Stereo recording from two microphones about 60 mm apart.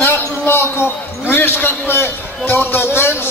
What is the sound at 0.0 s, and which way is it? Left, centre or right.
A man's voice, left.